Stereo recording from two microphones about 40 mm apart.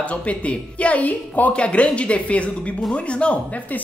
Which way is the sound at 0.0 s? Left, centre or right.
Left.